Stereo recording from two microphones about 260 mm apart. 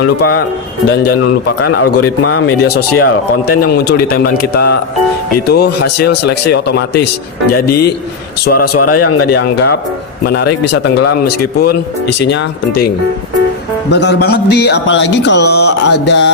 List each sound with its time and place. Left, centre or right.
0.0 s speech: left
2.0 s speech: left
2.6 s speech: left
8.7 s speech: left
10.2 s speech: left
13.9 s speech: left